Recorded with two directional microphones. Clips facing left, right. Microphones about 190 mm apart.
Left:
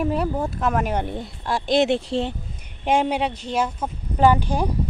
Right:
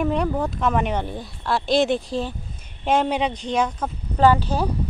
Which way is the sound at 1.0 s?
20° left (ahead or behind).